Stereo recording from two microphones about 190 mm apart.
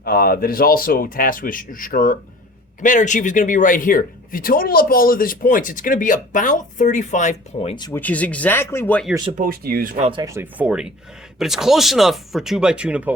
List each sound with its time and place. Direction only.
0.0 s speech: 50° left (ahead or behind); by 7.9 s 30° left (ahead or behind)
7.9 s speech: 10° left (ahead or behind)
9.4 s speech: 50° right (ahead or behind)
10.0 s speech: 25° right (ahead or behind); by 13.1 s 5° right (ahead or behind)